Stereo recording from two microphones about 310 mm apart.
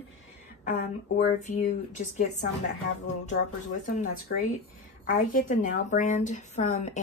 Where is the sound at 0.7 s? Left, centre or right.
Left.